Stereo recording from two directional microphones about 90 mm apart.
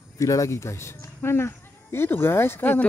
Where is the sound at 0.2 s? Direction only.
35° left (ahead or behind).